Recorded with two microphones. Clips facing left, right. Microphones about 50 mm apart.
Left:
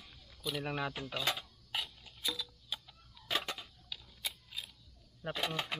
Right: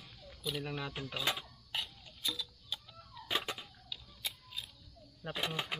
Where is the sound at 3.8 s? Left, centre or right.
Centre.